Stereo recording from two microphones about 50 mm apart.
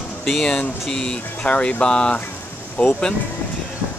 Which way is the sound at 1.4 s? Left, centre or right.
Left.